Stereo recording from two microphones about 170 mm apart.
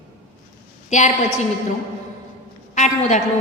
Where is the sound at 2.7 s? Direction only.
45° left (ahead or behind).